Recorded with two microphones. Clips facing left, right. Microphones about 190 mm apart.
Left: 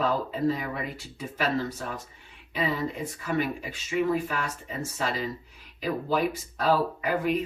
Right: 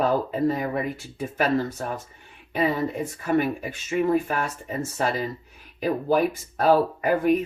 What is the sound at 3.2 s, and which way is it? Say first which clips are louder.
Speech: right 5 dB; 50° right (ahead or behind).